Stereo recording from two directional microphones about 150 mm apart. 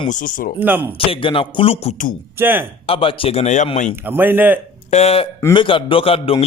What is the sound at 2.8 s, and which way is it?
Speech, 35° left (ahead or behind).